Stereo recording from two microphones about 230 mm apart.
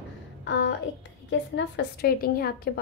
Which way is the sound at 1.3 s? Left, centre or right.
Left.